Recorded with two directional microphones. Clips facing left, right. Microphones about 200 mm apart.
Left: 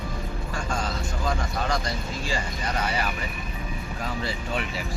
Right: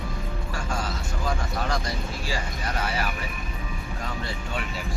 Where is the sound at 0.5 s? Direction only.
5° right (ahead or behind).